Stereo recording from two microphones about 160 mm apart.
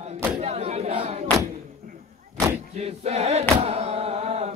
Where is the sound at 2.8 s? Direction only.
40° right (ahead or behind).